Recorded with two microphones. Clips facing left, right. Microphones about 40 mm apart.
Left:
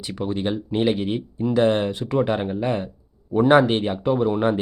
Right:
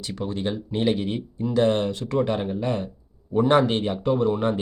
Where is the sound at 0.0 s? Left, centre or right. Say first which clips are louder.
Left 3 dB; centre.